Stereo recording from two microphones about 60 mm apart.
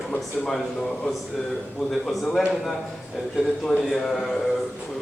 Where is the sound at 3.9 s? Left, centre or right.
Centre.